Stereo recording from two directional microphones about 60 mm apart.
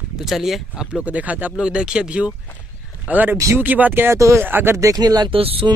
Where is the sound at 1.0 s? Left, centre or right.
Right.